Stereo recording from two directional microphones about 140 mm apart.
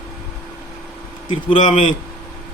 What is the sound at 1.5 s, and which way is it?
Speech, 60° left (ahead or behind).